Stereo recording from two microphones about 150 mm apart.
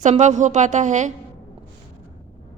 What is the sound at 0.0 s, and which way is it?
A woman's voice, 50° right (ahead or behind).